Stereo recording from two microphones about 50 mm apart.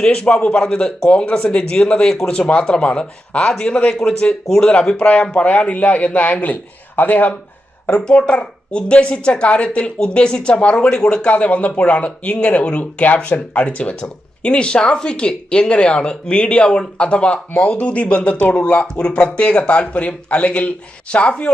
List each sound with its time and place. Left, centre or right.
0.0 s speech: centre; by 7.3 s left
8.0 s speech: centre